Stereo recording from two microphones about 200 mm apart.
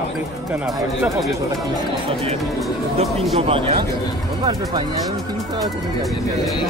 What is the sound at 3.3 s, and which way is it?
Speech, 30° right (ahead or behind).